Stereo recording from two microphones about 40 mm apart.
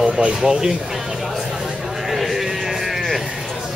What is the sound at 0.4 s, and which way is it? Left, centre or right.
Speech, centre.